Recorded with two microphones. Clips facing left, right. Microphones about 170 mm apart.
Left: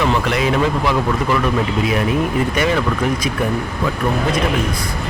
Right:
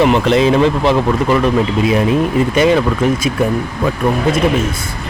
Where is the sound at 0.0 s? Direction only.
25° right (ahead or behind).